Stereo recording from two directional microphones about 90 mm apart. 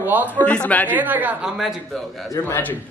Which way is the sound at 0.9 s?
20° right (ahead or behind).